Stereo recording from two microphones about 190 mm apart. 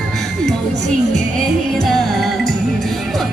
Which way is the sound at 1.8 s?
Centre (ahead or behind).